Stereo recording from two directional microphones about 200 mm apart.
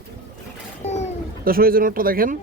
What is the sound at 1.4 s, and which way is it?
Speech, 45° right (ahead or behind).